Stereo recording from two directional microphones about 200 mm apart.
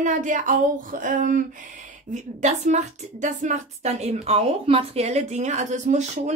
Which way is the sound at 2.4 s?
35° right (ahead or behind).